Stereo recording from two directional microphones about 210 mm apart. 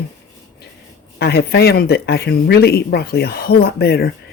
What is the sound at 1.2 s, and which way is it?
Speech, 50° left (ahead or behind).